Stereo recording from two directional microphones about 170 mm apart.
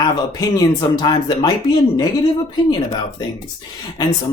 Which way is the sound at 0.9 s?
25° left (ahead or behind).